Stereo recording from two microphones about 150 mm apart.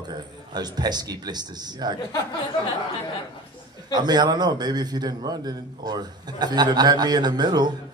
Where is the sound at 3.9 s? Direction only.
30° right (ahead or behind).